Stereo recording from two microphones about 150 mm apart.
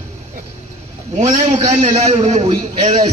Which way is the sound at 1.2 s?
50° right (ahead or behind).